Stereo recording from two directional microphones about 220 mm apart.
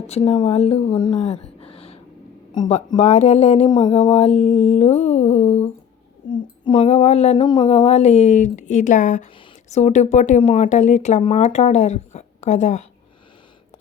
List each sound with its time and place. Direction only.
0.1 s speech: 20° left (ahead or behind)
4.3 s mantra: centre (ahead or behind)
5.0 s speech: 30° left (ahead or behind)